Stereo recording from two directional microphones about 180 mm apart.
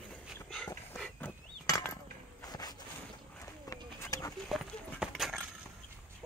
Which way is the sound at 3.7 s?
20° left (ahead or behind).